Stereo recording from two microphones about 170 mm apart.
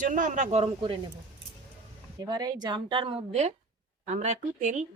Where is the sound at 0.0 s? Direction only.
50° right (ahead or behind); by 0.9 s 35° right (ahead or behind).